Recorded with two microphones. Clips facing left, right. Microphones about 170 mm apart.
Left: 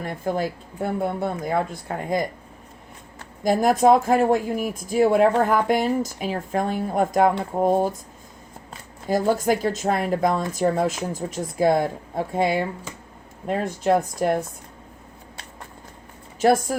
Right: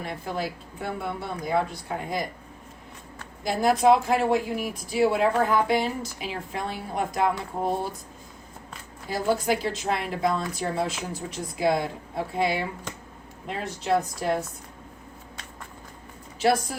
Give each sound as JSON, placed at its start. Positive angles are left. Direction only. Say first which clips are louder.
{"t": 0.0, "sound": "speech", "louder": "left 5 dB", "side_deg": 45}
{"t": 3.4, "sound": "speech", "louder": "left 3 dB", "side_deg": 45}
{"t": 9.0, "sound": "speech", "louder": "left 4 dB", "side_deg": 45}
{"t": 16.4, "sound": "speech", "louder": "left 4 dB", "side_deg": 45}